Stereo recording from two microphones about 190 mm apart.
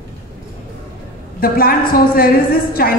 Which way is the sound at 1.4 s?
50° left (ahead or behind).